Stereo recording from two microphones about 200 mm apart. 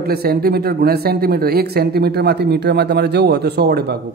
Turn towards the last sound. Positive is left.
turn(degrees=-50)  # may be behind; listen again after turning